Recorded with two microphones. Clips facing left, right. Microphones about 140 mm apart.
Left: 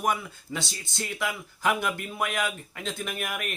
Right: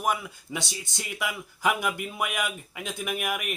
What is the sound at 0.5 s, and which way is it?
Speech, 15° right (ahead or behind).